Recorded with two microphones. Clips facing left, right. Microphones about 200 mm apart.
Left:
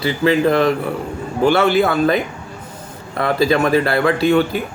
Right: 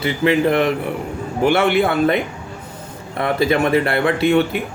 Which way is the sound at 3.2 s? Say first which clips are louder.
Left 1 dB; 25° right (ahead or behind).